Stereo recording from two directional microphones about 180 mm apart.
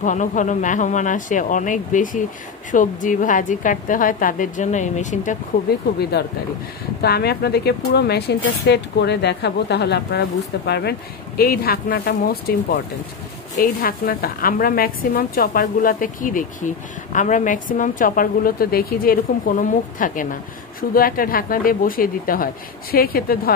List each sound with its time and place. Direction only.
0.0 s speech: 45° left (ahead or behind)
6.2 s speech: 65° left (ahead or behind)